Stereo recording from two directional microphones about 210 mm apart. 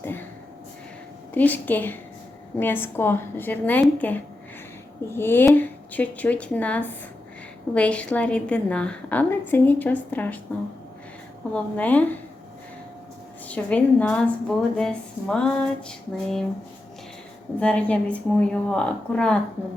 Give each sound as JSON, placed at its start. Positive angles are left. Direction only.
{"t": 1.3, "sound": "a woman's voice", "side_deg": 10}
{"t": 11.5, "sound": "a woman's voice", "side_deg": 5}
{"t": 13.5, "sound": "a woman's voice", "side_deg": 5}
{"t": 17.6, "sound": "a woman's voice", "side_deg": 5}